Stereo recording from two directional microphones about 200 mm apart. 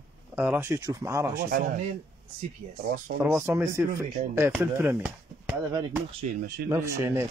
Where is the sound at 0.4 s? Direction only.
10° right (ahead or behind).